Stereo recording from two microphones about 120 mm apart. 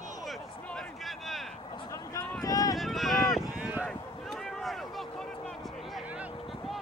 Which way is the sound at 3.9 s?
5° left (ahead or behind).